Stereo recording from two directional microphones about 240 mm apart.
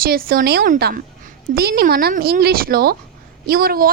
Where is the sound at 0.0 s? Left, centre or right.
Right.